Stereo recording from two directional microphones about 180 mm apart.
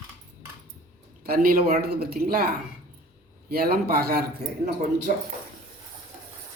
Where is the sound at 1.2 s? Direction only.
55° right (ahead or behind).